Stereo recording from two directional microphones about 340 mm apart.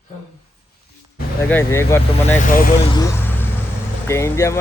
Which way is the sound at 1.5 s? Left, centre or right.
Centre.